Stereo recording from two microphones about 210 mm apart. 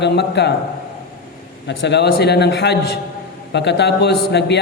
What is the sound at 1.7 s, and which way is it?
A man's voice, 55° left (ahead or behind).